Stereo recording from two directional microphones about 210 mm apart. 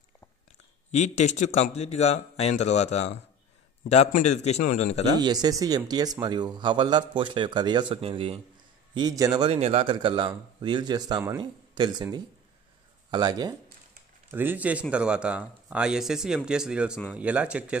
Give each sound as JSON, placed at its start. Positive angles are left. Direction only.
{"t": 0.9, "sound": "speech", "side_deg": 35}
{"t": 5.2, "sound": "a man's voice", "side_deg": -20}